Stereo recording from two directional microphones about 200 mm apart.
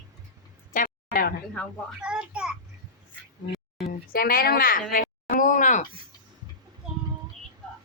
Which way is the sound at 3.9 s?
45° left (ahead or behind).